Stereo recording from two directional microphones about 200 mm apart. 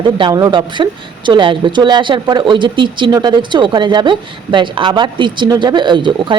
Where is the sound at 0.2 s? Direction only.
20° right (ahead or behind).